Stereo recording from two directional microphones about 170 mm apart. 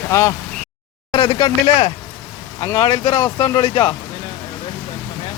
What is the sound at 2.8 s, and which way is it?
Speech, 30° left (ahead or behind).